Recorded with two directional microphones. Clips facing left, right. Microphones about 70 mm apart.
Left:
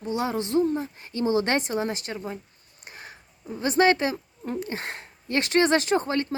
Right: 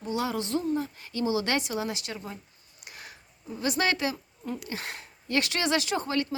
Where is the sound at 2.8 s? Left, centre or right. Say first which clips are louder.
Left 3 dB; left.